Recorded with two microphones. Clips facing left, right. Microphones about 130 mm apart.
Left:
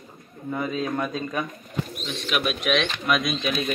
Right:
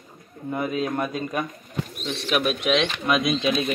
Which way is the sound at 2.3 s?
35° right (ahead or behind).